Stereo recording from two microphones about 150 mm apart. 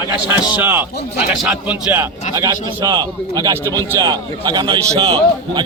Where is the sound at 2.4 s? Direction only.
25° right (ahead or behind).